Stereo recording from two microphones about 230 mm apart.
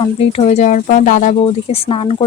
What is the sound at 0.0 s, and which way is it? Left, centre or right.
Speech, left.